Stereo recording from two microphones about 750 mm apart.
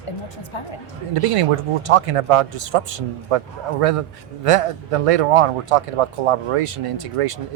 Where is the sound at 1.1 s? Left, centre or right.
Right.